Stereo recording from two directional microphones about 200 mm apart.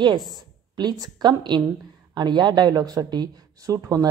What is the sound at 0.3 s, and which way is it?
A woman's voice, 20° right (ahead or behind).